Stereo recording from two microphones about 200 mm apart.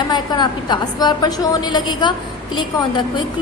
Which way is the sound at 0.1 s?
20° left (ahead or behind).